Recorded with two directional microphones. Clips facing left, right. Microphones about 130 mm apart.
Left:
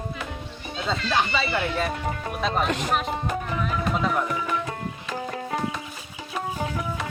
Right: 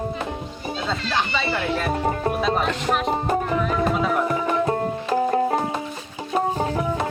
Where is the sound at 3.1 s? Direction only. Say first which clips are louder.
Right 6 dB; 40° right (ahead or behind).